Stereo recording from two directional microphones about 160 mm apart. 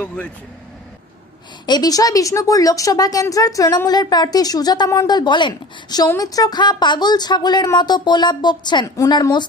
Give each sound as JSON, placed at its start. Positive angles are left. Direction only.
{"t": 0.0, "sound": "speech", "side_deg": 10}
{"t": 1.7, "sound": "speech", "side_deg": 25}